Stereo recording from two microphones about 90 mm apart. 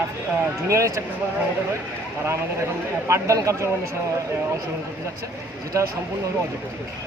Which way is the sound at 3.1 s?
35° right (ahead or behind).